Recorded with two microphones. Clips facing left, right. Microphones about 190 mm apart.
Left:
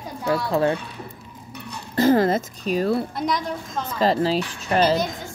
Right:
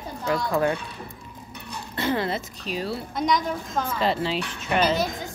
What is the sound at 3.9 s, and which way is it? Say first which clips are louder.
Speech: left 7 dB; 40° left (ahead or behind).